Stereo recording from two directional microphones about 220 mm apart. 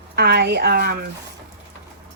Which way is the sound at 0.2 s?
50° right (ahead or behind).